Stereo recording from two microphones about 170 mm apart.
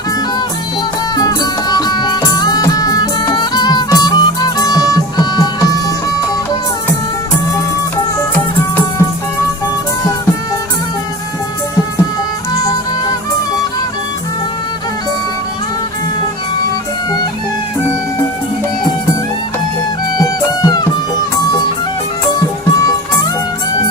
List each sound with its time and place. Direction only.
1.7 s music: 25° left (ahead or behind)
20.1 s music: 25° left (ahead or behind)